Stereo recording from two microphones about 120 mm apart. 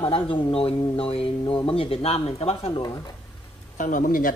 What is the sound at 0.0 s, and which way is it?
Speech, 45° left (ahead or behind).